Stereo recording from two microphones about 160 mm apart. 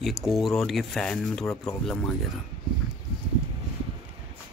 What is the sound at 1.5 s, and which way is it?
Speech, 20° left (ahead or behind).